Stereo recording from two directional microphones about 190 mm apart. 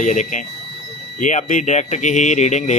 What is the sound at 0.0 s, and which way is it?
Speech, 40° left (ahead or behind).